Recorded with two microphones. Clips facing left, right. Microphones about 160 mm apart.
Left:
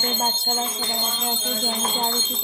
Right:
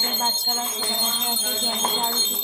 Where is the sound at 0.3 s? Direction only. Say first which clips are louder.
Left 3 dB; 25° left (ahead or behind).